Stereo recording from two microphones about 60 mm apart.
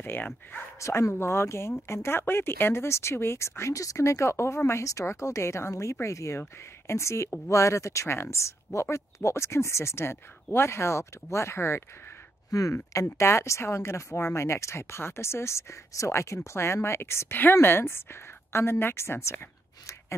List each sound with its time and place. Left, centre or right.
0.0 s speech: left
0.7 s speech: left
1.2 s speech: left
12.4 s speech: left
13.2 s speech: left